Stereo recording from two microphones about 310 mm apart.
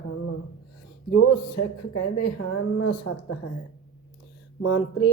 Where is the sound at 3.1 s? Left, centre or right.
Left.